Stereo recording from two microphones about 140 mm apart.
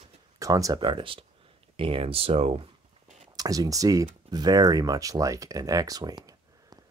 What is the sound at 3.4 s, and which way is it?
Speech, 25° right (ahead or behind).